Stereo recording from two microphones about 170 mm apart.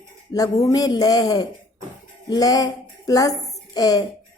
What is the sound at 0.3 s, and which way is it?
A woman's voice, 20° left (ahead or behind).